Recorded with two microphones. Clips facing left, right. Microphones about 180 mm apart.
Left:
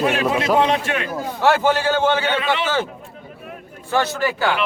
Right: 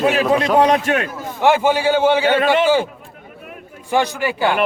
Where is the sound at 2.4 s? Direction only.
45° right (ahead or behind).